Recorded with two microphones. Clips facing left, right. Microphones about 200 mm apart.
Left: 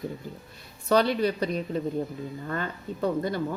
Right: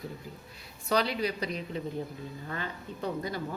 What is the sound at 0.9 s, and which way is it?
Speech, 50° left (ahead or behind).